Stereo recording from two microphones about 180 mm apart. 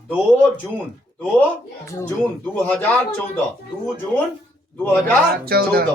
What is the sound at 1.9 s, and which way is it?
Speech, 15° left (ahead or behind).